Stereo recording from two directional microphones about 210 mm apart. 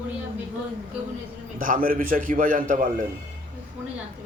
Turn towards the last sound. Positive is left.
turn(degrees=-40)  # may be behind; listen again after turning